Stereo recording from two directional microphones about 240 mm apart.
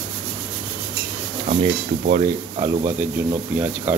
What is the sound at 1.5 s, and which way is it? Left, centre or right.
Speech, right.